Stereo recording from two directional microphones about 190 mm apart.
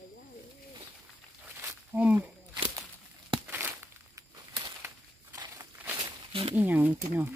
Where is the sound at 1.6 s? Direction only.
10° right (ahead or behind).